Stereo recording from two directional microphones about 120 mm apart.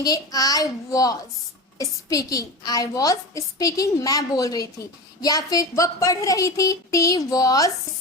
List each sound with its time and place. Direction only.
0.0 s a woman's voice: 30° left (ahead or behind)